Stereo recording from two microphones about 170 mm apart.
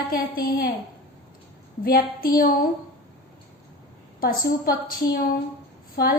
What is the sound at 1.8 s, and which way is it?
Speech, 60° left (ahead or behind).